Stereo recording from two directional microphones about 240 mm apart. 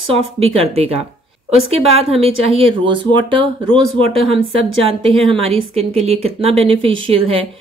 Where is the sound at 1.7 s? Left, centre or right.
Right.